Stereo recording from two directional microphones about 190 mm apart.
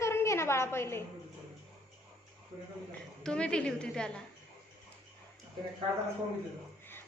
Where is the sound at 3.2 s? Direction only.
5° left (ahead or behind).